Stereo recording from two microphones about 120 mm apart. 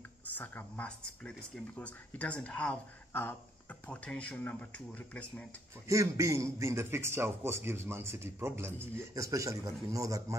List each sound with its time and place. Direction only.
0.3 s speech: 15° left (ahead or behind)
5.9 s a man's voice: 25° right (ahead or behind)